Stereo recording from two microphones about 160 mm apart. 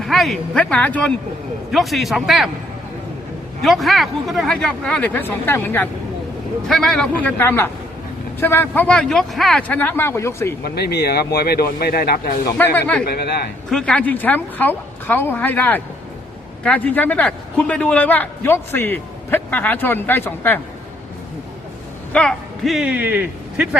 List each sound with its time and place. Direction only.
0.0 s a man's voice: centre (ahead or behind)
3.6 s a man's voice: centre (ahead or behind); by 10.5 s 15° left (ahead or behind)
10.6 s speech: 80° left
12.5 s a man's voice: 10° left (ahead or behind)
13.1 s a man's voice: 85° left
13.7 s a man's voice: 5° left (ahead or behind)
22.1 s speech: 5° left (ahead or behind); by 23.6 s 10° right (ahead or behind)